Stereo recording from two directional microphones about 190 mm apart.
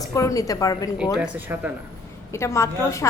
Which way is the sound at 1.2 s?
10° right (ahead or behind).